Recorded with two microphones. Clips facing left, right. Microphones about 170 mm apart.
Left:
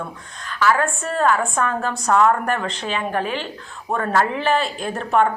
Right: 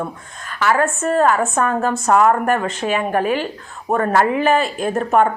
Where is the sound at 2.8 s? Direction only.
50° right (ahead or behind).